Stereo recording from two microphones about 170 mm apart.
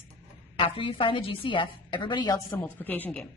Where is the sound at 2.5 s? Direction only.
10° left (ahead or behind).